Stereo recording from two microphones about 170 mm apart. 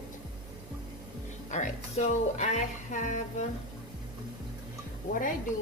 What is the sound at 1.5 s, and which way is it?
A woman's voice, 45° left (ahead or behind).